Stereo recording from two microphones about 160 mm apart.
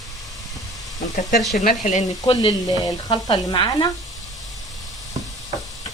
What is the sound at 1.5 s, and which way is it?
Speech, 55° left (ahead or behind).